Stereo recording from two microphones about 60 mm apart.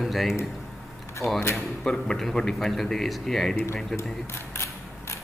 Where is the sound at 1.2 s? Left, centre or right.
Left.